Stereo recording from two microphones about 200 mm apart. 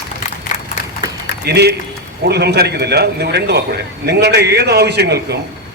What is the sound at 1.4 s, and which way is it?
A man's voice, 55° right (ahead or behind).